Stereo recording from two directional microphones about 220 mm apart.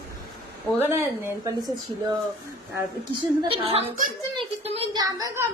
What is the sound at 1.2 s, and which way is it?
Speech, 10° right (ahead or behind).